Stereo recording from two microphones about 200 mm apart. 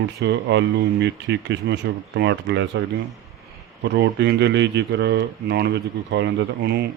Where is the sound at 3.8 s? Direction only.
60° right (ahead or behind).